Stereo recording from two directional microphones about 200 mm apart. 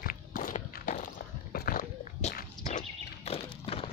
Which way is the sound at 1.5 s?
45° left (ahead or behind).